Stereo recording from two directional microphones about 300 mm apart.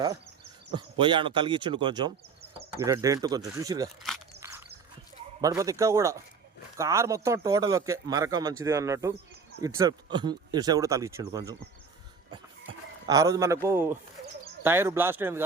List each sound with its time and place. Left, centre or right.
0.7 s a man's voice: centre
4.4 s a sound: centre
5.4 s a man's voice: centre
13.1 s a man's voice: centre